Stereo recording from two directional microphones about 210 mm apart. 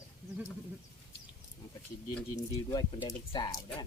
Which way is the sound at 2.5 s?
20° left (ahead or behind).